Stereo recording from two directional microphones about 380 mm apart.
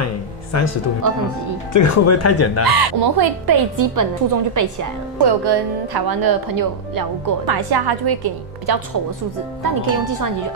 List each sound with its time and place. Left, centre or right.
0.0 s a sound: left
1.7 s speech: left
2.6 s speech: right
5.2 s speech: right
9.6 s speech: right